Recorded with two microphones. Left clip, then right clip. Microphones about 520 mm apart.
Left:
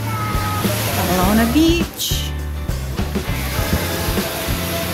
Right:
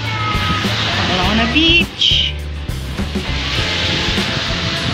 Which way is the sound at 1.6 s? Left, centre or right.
Left.